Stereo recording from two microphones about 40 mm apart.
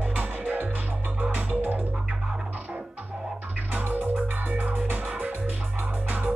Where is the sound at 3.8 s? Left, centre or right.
Right.